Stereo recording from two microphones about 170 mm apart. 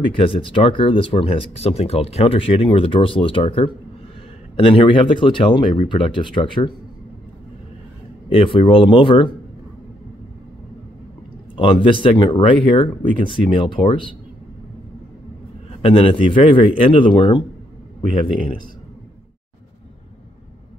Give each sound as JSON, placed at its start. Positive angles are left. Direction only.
{"t": 0.2, "sound": "speech", "side_deg": 30}
{"t": 8.3, "sound": "speech", "side_deg": 30}
{"t": 11.5, "sound": "speech", "side_deg": 30}
{"t": 15.8, "sound": "speech", "side_deg": 30}